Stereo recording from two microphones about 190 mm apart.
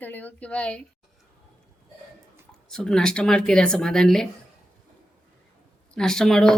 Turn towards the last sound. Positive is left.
turn(degrees=0)  # may be behind; listen again after turning